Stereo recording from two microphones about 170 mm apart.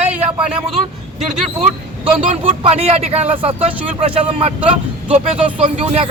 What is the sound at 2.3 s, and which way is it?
Speech, 40° right (ahead or behind).